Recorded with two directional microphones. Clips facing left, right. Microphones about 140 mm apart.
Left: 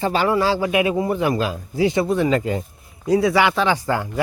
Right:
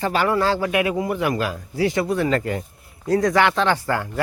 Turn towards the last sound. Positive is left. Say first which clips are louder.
# left 1 dB
turn(degrees=15)  # may be behind; listen again after turning